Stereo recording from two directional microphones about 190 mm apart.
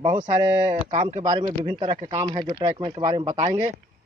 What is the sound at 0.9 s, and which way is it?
Speech, 40° right (ahead or behind).